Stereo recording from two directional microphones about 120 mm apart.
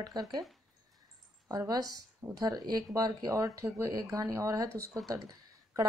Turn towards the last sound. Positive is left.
turn(degrees=-30)  # may be behind; listen again after turning